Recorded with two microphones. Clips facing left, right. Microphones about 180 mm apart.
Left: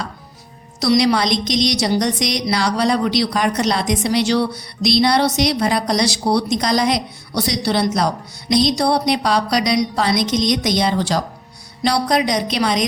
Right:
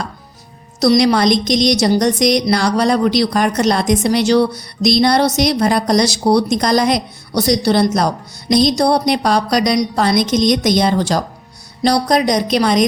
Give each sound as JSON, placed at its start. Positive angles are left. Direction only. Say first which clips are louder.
{"t": 0.8, "sound": "a woman's voice", "louder": "right 3 dB", "side_deg": -45}